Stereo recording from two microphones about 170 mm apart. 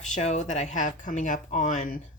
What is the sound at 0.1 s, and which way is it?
Speech, 45° left (ahead or behind).